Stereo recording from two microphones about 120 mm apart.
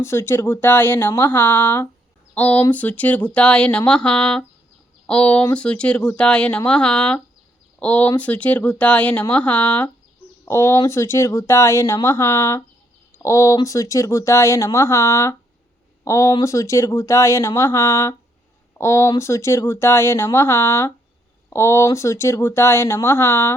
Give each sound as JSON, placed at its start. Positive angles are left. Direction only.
{"t": 0.0, "sound": "speech", "side_deg": 20}